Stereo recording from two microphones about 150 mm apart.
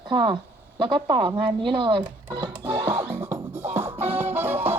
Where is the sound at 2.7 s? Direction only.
25° right (ahead or behind).